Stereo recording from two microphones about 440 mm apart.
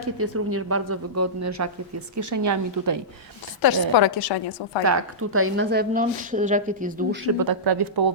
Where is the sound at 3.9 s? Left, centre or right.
Left.